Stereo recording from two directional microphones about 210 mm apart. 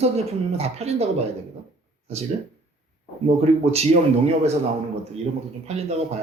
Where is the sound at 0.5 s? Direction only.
30° right (ahead or behind).